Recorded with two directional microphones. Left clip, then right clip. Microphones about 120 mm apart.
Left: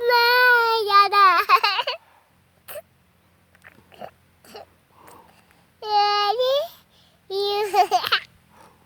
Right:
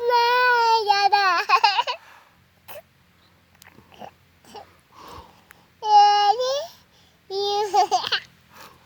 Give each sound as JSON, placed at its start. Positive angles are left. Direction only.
{"t": 0.1, "sound": "child singing", "side_deg": 30}
{"t": 3.6, "sound": "pig", "side_deg": 20}
{"t": 4.9, "sound": "sniff", "side_deg": -5}
{"t": 5.8, "sound": "child singing", "side_deg": 30}